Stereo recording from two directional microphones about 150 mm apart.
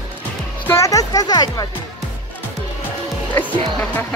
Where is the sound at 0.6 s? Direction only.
20° left (ahead or behind).